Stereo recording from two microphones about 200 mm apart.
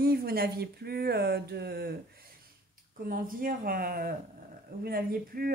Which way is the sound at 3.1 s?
45° right (ahead or behind).